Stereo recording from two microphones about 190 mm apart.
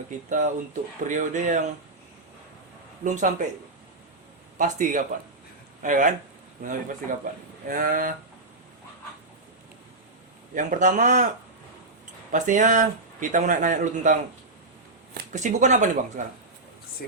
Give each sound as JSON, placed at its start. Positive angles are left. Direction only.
{"t": 0.3, "sound": "speech", "side_deg": -40}
{"t": 3.0, "sound": "speech", "side_deg": -40}
{"t": 4.5, "sound": "speech", "side_deg": -40}
{"t": 7.7, "sound": "speech", "side_deg": -45}
{"t": 10.5, "sound": "speech", "side_deg": -40}
{"t": 12.3, "sound": "speech", "side_deg": -40}
{"t": 17.0, "sound": "speech", "side_deg": 55}